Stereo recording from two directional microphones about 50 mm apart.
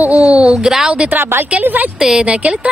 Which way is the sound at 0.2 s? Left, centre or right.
Right.